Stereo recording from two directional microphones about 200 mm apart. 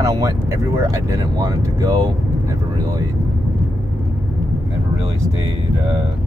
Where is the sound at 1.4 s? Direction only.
15° right (ahead or behind).